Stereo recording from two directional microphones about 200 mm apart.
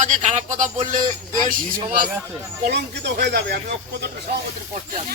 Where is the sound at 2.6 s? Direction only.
50° right (ahead or behind).